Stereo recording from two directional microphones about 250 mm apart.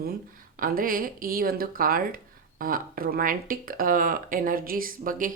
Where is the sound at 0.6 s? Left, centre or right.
Right.